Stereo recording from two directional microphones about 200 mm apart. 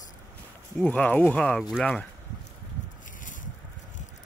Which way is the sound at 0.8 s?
5° left (ahead or behind).